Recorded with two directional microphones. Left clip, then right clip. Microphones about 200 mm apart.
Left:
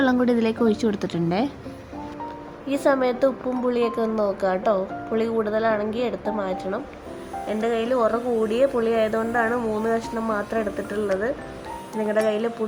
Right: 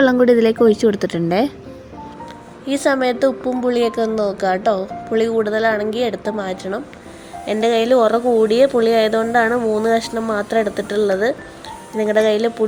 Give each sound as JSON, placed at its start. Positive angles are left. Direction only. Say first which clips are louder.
{"t": 0.0, "sound": "speech", "louder": "right 8 dB", "side_deg": -20}
{"t": 2.6, "sound": "a woman's voice", "louder": "right 4 dB", "side_deg": -15}